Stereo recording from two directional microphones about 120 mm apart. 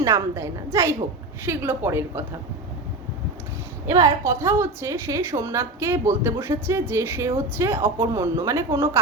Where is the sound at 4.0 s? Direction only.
25° right (ahead or behind).